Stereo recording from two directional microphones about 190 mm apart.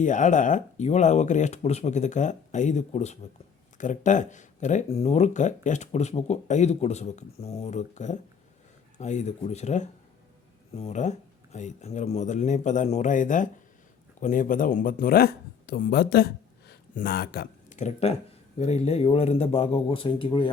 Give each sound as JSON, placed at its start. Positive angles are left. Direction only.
{"t": 0.0, "sound": "speech", "side_deg": 40}
{"t": 17.7, "sound": "speech", "side_deg": 40}